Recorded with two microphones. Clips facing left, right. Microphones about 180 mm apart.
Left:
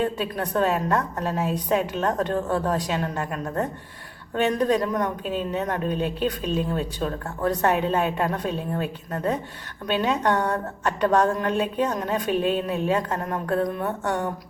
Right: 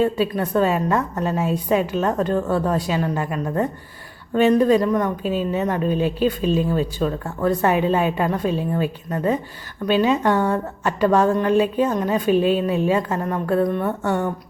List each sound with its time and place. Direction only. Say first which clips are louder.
0.0 s a woman's voice: right 6 dB; centre (ahead or behind)